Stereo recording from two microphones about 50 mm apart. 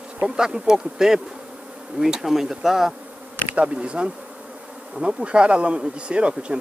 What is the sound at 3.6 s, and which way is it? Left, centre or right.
Speech, right.